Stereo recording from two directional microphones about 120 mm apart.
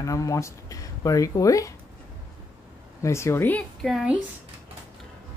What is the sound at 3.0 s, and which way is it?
Speech, 25° left (ahead or behind).